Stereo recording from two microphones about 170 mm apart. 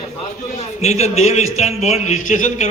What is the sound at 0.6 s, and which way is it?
A man's voice, 40° left (ahead or behind).